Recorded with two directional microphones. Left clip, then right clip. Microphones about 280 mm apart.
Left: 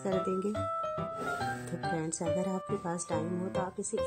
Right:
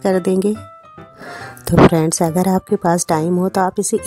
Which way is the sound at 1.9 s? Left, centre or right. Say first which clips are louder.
Right 16 dB; right.